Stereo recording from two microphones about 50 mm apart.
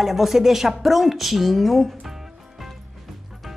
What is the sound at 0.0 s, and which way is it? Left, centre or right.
Speech, centre.